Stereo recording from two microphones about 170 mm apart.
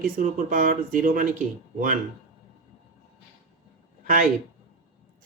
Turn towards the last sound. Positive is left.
turn(degrees=-50)  # may be behind; listen again after turning